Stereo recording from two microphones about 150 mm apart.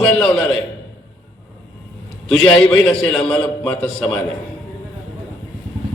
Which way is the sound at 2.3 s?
5° left (ahead or behind).